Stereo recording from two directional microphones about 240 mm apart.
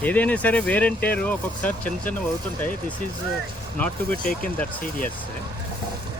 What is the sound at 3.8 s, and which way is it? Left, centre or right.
Speech, centre.